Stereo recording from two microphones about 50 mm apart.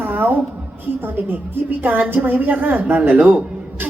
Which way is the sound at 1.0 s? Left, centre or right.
Right.